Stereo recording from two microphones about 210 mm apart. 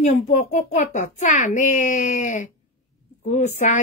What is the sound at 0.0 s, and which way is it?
A woman's voice, 35° left (ahead or behind).